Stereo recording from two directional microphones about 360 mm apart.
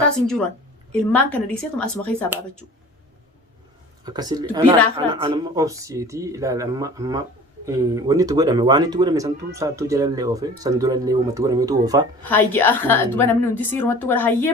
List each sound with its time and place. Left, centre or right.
1.1 s a woman's voice: centre
4.0 s speech: centre
12.3 s a woman's voice: centre